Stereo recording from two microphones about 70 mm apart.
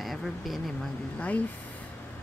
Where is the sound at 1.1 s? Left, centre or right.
Left.